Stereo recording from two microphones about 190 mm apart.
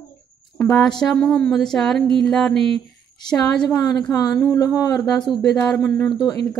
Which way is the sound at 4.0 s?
20° left (ahead or behind).